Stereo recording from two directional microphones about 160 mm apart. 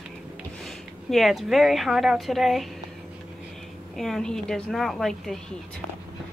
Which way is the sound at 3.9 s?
Centre (ahead or behind).